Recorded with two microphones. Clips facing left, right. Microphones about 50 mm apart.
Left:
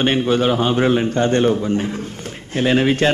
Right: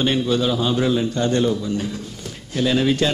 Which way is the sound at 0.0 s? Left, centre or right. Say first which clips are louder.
Left 3 dB; left.